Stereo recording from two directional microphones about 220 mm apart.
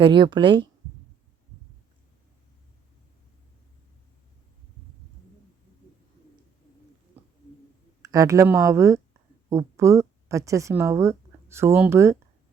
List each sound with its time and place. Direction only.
0.0 s speech: 20° right (ahead or behind)
8.0 s a woman's voice: 15° right (ahead or behind)